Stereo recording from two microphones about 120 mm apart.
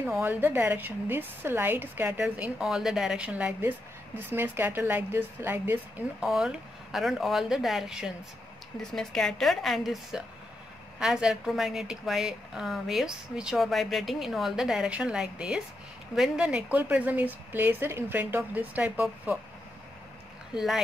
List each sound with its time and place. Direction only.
0.2 s a woman's voice: 15° right (ahead or behind)
6.2 s a woman's voice: 5° right (ahead or behind)
20.5 s a woman's voice: 5° right (ahead or behind)